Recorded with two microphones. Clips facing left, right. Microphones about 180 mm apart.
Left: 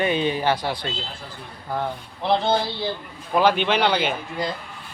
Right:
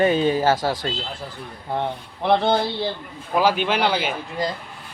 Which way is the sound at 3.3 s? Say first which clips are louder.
Left 1 dB; 5° right (ahead or behind).